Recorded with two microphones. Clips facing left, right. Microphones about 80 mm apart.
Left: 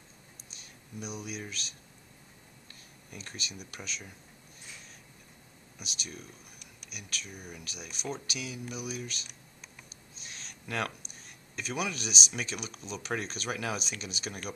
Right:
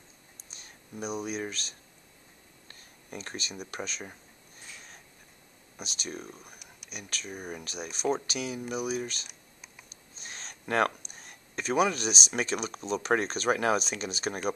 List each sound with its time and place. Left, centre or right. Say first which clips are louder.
0.5 s speech: right 3 dB; right
5.8 s speech: right 5 dB; right
10.1 s a sound: right 4 dB; right
11.5 s speech: right 8 dB; right